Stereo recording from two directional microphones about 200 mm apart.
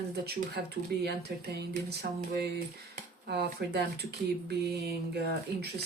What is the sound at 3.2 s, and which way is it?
Speech, 55° right (ahead or behind).